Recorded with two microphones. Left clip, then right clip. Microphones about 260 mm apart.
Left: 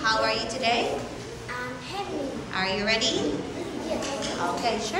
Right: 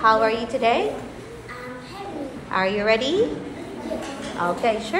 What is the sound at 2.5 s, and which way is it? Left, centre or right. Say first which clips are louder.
Speech: right 7 dB; centre.